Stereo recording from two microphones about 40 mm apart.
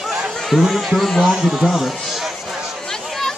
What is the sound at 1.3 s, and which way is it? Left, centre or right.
Speech, centre.